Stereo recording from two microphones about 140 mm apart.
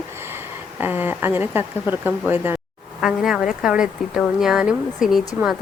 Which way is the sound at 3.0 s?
5° right (ahead or behind).